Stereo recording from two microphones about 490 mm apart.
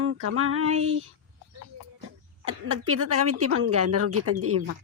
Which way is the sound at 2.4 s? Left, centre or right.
Right.